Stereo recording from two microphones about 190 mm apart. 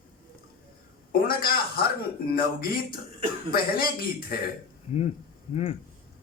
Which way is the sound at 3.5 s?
50° left (ahead or behind).